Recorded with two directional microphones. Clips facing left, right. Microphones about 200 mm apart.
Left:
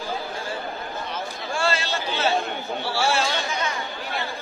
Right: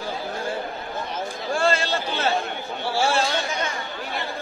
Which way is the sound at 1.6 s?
50° right (ahead or behind).